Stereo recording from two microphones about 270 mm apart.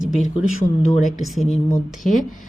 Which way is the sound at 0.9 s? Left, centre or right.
Left.